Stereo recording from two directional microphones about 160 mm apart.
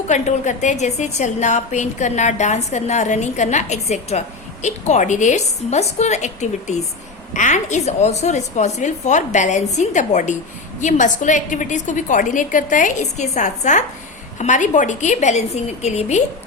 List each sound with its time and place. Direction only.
0.1 s a woman's voice: 50° left (ahead or behind)